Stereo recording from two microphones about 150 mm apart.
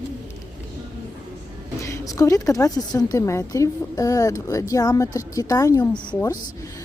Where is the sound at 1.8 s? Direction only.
20° left (ahead or behind).